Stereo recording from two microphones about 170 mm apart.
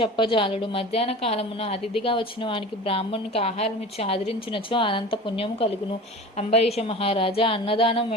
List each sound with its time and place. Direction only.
0.0 s a woman's voice: 30° left (ahead or behind)